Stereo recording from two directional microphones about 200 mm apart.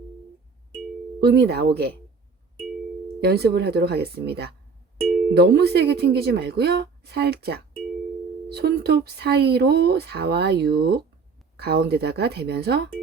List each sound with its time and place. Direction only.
1.2 s speech: 55° right (ahead or behind)
3.2 s speech: 55° right (ahead or behind)